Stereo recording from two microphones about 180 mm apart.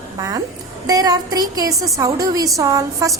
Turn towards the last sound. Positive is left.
turn(degrees=-20)  # may be behind; listen again after turning